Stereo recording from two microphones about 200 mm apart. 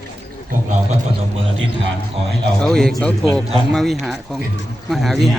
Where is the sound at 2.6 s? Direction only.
Centre (ahead or behind).